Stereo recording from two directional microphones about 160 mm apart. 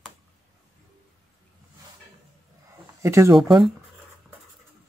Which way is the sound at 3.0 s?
20° right (ahead or behind).